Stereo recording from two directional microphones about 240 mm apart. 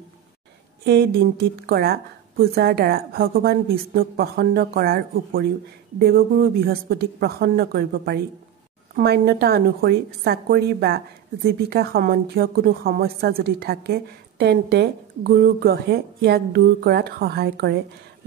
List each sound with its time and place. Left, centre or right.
0.8 s a woman's voice: right